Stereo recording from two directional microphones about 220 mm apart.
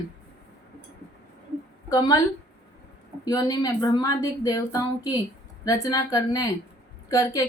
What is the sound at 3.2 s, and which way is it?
A woman's voice, 15° left (ahead or behind).